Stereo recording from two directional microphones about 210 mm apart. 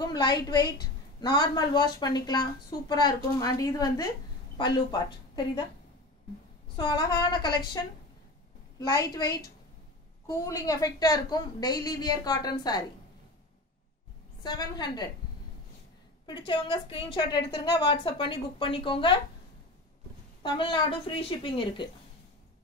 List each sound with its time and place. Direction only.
0.0 s a woman's voice: 20° left (ahead or behind)
6.8 s a woman's voice: 20° left (ahead or behind)
14.4 s a woman's voice: 20° left (ahead or behind)
16.3 s a woman's voice: 20° left (ahead or behind)
20.4 s a woman's voice: 20° left (ahead or behind)